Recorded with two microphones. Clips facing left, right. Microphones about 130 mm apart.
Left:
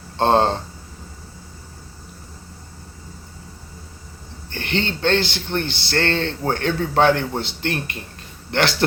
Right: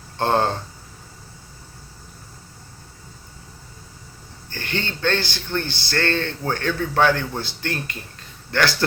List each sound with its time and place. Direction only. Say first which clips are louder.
0.2 s speech: left 3 dB; 20° left (ahead or behind)
4.5 s speech: left 4 dB; 20° left (ahead or behind)